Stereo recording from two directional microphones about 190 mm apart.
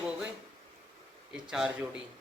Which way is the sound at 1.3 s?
5° right (ahead or behind).